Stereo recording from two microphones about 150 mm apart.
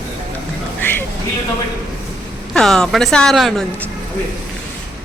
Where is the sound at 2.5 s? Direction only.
5° left (ahead or behind).